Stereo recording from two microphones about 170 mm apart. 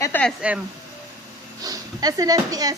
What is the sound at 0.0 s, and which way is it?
Speech, 10° left (ahead or behind).